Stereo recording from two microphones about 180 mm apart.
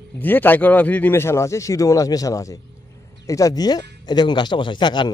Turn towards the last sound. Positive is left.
turn(degrees=25)  # may be behind; listen again after turning